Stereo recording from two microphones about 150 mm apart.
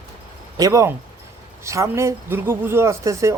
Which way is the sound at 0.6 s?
25° right (ahead or behind).